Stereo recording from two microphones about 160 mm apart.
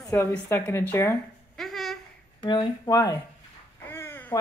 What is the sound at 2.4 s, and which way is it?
Speech, 30° left (ahead or behind).